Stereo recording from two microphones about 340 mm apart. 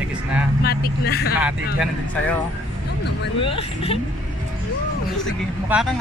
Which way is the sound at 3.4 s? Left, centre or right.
Centre.